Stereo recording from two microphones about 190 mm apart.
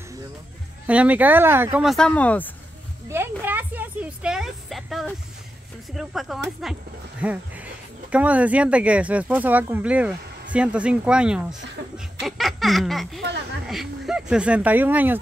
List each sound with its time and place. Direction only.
0.8 s speech: 5° right (ahead or behind); by 2.5 s 10° left (ahead or behind)
3.1 s a woman's voice: 10° right (ahead or behind)
12.2 s a sound: centre (ahead or behind)
13.2 s a woman's voice: 65° right (ahead or behind)
13.7 s speech: centre (ahead or behind)